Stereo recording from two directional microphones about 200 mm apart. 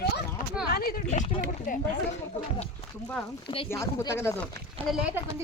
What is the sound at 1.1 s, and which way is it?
Speech, 35° left (ahead or behind).